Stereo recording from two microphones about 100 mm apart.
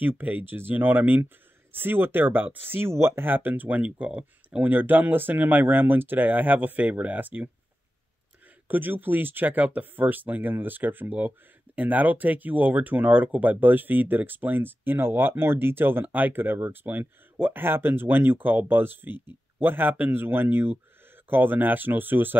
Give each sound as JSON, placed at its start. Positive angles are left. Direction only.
{"t": 0.0, "sound": "speech", "side_deg": -20}
{"t": 8.6, "sound": "speech", "side_deg": -20}